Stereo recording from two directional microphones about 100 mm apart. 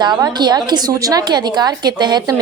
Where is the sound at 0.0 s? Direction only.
45° right (ahead or behind).